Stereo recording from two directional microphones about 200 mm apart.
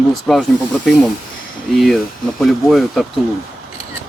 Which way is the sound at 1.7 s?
Centre (ahead or behind).